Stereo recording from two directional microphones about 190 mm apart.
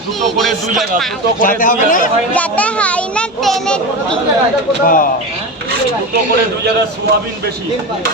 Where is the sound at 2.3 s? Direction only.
5° left (ahead or behind).